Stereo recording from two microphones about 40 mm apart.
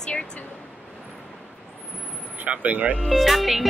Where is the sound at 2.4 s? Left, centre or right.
Right.